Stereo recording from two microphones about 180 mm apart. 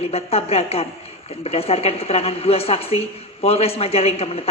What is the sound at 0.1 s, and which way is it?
Speech, 35° left (ahead or behind).